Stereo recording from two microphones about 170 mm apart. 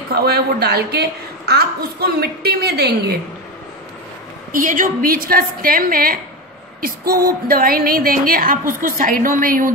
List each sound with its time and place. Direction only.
0.1 s a woman's voice: 70° right (ahead or behind)
4.5 s a woman's voice: 55° right (ahead or behind)